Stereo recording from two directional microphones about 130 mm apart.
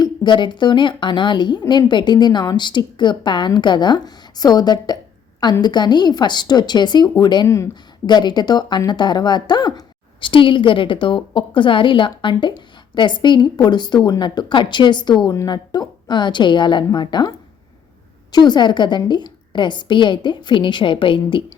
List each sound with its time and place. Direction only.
0.0 s a woman's voice: 35° left (ahead or behind)
7.4 s speech: 20° left (ahead or behind)
8.0 s a woman's voice: 35° left (ahead or behind)